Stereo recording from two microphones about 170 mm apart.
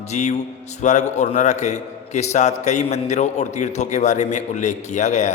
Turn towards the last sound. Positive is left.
turn(degrees=45)  # may be behind; listen again after turning